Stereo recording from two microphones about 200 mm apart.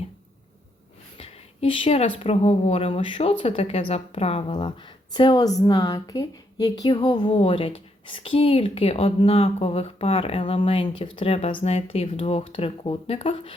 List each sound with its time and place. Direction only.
1.2 s a woman's voice: 25° left (ahead or behind)